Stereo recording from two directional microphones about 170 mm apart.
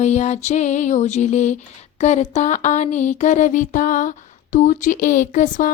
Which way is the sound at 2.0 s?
40° left (ahead or behind).